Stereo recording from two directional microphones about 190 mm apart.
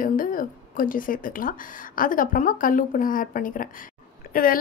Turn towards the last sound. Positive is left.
turn(degrees=50)  # may be behind; listen again after turning